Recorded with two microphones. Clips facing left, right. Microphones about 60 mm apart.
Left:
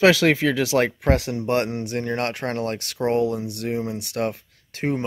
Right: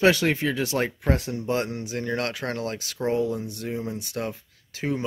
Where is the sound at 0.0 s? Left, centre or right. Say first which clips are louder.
Left 4 dB; left.